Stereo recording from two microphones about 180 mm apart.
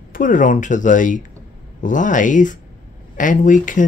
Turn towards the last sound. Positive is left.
turn(degrees=45)  # may be behind; listen again after turning